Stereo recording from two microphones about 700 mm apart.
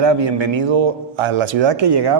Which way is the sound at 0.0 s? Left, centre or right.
Right.